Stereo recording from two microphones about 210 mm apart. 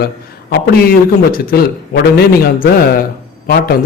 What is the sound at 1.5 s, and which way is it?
A man's voice, 50° left (ahead or behind).